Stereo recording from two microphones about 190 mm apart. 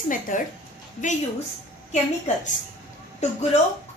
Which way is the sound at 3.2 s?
35° left (ahead or behind).